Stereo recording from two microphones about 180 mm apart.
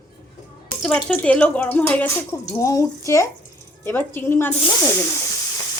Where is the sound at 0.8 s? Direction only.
5° left (ahead or behind).